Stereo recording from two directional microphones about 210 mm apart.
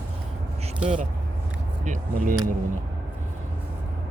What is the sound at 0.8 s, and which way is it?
Speech, 35° right (ahead or behind).